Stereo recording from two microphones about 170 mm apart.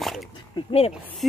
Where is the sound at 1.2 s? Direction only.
Centre (ahead or behind).